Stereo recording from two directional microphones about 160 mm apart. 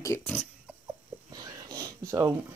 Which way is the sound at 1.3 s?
25° right (ahead or behind).